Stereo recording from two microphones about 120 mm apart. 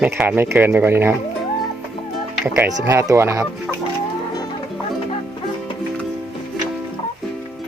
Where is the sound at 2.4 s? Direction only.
20° right (ahead or behind).